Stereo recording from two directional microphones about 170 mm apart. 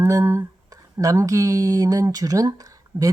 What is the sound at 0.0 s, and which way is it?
Speech, 15° right (ahead or behind).